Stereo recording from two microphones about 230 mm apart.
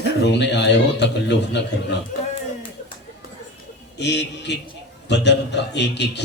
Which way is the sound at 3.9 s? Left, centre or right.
Left.